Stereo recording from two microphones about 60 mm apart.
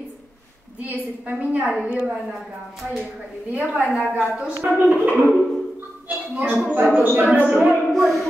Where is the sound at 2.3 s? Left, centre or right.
Centre.